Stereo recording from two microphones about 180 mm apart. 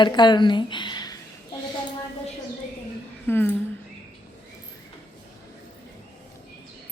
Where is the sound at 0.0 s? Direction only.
25° left (ahead or behind).